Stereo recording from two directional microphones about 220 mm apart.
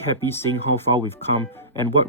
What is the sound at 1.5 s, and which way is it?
Speech, 10° left (ahead or behind).